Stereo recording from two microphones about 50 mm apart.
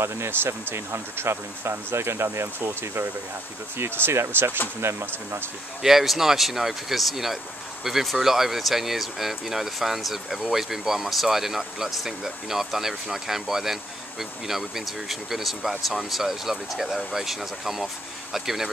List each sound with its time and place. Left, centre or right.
0.0 s speech: right
5.8 s speech: centre